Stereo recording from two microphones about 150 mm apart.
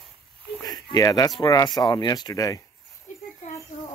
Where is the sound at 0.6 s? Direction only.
25° left (ahead or behind).